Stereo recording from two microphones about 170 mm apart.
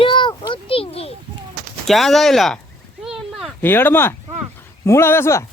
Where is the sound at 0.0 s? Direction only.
30° left (ahead or behind).